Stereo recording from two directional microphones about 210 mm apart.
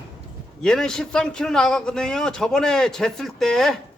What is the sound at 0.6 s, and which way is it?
A man's voice, centre (ahead or behind).